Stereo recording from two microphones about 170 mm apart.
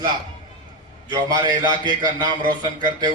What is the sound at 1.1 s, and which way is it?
A man's voice, 25° right (ahead or behind).